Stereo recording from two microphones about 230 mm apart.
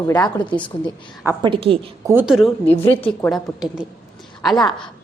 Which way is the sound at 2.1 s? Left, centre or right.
Centre.